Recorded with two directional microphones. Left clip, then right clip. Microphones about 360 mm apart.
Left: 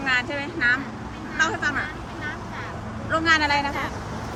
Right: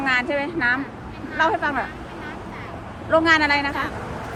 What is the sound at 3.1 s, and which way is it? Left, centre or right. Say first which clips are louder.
Speech: right 3 dB; centre.